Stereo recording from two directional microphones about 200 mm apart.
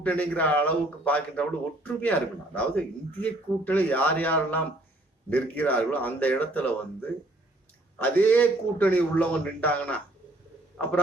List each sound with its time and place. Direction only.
0.0 s speech: 5° left (ahead or behind)
7.9 s speech: 10° left (ahead or behind)